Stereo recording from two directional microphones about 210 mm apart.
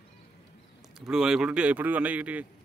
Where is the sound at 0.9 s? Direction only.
5° right (ahead or behind).